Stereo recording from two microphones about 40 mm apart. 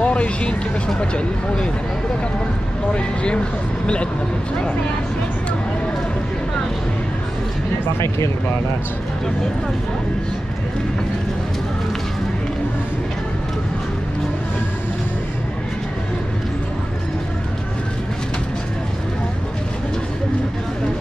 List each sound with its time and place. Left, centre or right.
0.0 s speech: left
3.8 s speech: left